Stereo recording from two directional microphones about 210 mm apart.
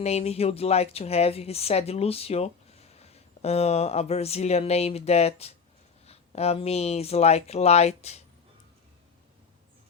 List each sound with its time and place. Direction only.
0.0 s speech: 30° left (ahead or behind)